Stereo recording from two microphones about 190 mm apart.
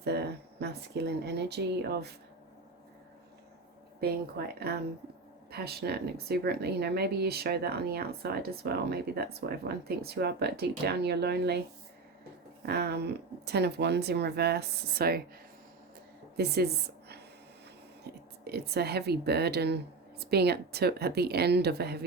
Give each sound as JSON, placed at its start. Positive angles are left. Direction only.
{"t": 0.0, "sound": "speech", "side_deg": -60}
{"t": 4.0, "sound": "speech", "side_deg": -55}
{"t": 12.6, "sound": "speech", "side_deg": -60}
{"t": 16.4, "sound": "a woman's voice", "side_deg": -55}